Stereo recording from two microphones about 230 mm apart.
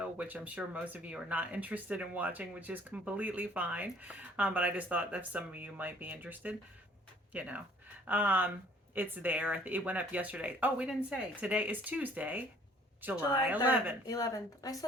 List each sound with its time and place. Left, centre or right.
0.0 s speech: centre
13.7 s speech: centre
14.1 s a woman's voice: centre